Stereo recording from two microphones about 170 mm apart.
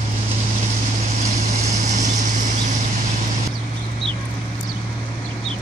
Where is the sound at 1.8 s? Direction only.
45° right (ahead or behind).